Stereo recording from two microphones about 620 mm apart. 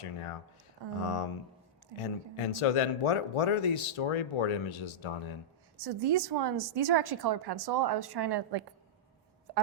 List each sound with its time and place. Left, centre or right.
1.0 s speech: left
5.7 s a woman's voice: right